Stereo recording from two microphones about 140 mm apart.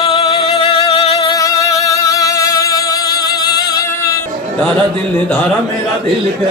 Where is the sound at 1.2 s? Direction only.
25° left (ahead or behind).